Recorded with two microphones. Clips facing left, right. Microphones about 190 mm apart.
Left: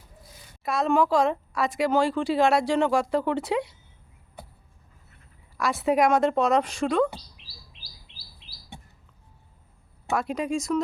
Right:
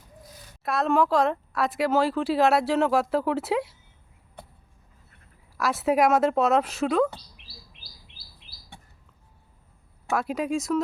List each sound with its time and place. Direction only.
0.6 s speech: centre (ahead or behind)
4.4 s vehicle: 5° left (ahead or behind)
5.5 s speech: 5° right (ahead or behind)
7.4 s chirp: 55° right (ahead or behind)
10.1 s speech: 5° right (ahead or behind)